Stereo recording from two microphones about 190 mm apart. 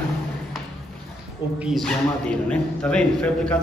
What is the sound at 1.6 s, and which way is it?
A man's voice, centre (ahead or behind).